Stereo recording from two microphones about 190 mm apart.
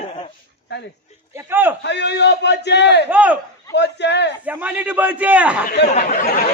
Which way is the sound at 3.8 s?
65° left (ahead or behind).